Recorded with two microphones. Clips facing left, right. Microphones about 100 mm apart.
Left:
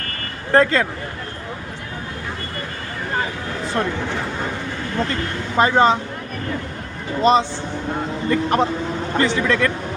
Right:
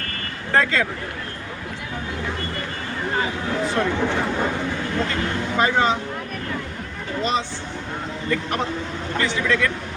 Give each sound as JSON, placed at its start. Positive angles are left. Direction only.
{"t": 0.5, "sound": "speech", "side_deg": 40}
{"t": 5.5, "sound": "speech", "side_deg": 35}
{"t": 7.2, "sound": "speech", "side_deg": 35}